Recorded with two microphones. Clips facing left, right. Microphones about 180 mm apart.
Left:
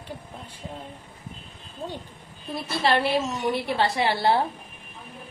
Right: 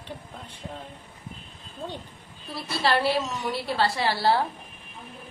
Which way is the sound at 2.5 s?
20° left (ahead or behind).